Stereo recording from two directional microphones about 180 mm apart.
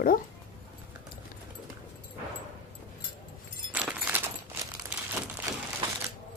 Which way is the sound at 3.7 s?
10° right (ahead or behind).